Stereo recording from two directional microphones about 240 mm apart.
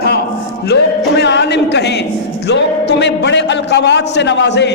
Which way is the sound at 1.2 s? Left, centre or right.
Left.